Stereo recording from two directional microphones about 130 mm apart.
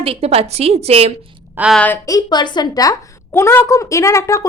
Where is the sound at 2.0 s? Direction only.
30° left (ahead or behind).